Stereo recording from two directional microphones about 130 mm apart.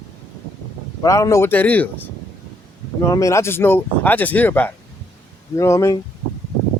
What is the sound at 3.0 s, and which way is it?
Speech, 25° left (ahead or behind).